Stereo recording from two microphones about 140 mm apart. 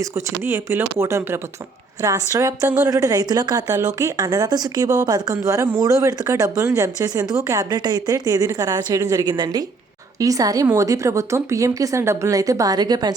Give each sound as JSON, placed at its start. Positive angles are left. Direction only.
{"t": 0.0, "sound": "a woman's voice", "side_deg": -20}